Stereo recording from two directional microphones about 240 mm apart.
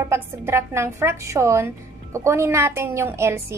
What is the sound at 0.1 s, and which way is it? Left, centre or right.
A woman's voice, centre.